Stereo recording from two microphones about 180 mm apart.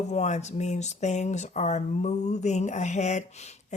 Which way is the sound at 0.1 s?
40° left (ahead or behind).